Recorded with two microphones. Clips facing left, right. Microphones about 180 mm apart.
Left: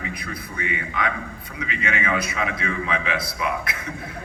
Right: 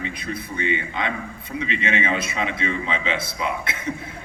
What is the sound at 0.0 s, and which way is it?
A man's voice, 25° right (ahead or behind).